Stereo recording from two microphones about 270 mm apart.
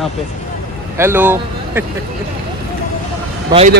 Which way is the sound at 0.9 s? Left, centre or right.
Centre.